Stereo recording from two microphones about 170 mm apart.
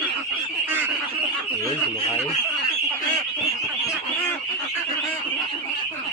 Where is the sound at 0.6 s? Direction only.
10° right (ahead or behind).